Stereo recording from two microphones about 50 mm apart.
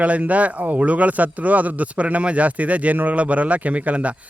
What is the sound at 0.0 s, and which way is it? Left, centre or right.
A man's voice, right.